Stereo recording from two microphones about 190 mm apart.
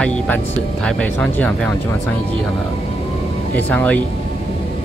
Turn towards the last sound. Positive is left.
turn(degrees=5)  # may be behind; listen again after turning